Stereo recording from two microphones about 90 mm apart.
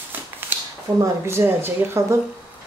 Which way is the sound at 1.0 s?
30° right (ahead or behind).